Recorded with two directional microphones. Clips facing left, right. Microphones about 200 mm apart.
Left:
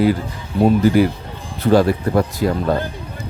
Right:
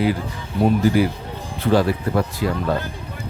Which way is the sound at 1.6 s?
40° left (ahead or behind).